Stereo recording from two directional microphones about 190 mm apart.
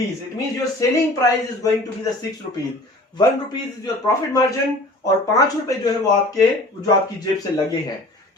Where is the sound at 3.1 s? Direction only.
20° left (ahead or behind).